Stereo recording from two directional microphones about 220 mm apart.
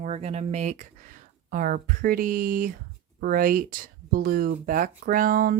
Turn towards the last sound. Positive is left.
turn(degrees=-40)  # may be behind; listen again after turning